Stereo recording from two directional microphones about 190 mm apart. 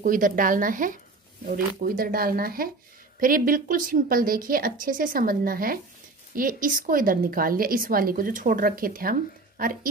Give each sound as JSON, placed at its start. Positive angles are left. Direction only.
{"t": 0.0, "sound": "a woman's voice", "side_deg": -45}